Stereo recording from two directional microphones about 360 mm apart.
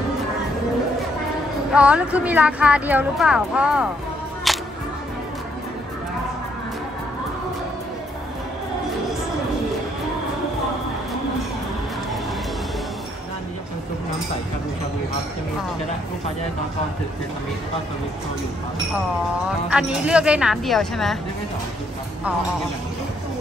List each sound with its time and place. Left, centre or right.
1.7 s speech: centre
4.5 s music: centre
19.7 s speech: centre